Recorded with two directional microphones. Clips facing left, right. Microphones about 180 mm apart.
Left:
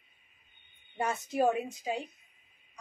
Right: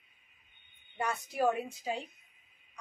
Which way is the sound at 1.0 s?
25° left (ahead or behind).